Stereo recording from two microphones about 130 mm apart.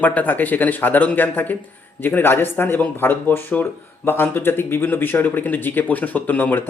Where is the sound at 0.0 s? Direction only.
15° left (ahead or behind).